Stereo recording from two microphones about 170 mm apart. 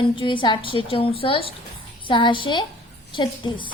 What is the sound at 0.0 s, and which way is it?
A woman's voice, 30° left (ahead or behind).